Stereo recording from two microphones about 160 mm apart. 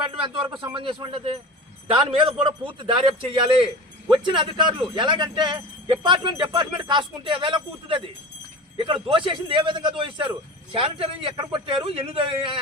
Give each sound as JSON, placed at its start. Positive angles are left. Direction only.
{"t": 0.0, "sound": "speech", "side_deg": -30}